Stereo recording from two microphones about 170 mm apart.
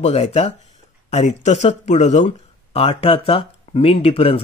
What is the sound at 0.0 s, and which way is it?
Speech, 40° left (ahead or behind).